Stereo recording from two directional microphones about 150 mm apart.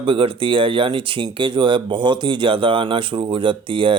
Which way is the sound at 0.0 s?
35° right (ahead or behind).